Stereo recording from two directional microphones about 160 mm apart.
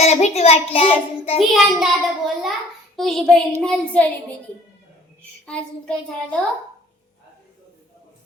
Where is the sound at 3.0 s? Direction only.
Centre (ahead or behind).